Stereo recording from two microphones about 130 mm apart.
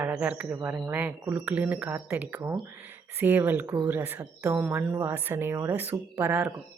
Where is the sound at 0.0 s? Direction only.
10° right (ahead or behind).